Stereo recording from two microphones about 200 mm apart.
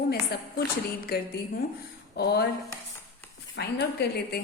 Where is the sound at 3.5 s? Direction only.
55° left (ahead or behind).